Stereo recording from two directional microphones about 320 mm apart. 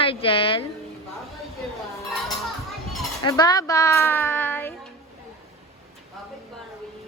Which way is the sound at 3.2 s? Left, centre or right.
Centre.